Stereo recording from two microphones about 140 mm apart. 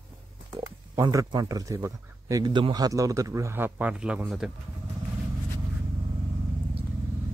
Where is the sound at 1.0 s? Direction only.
25° right (ahead or behind); by 4.5 s 5° right (ahead or behind).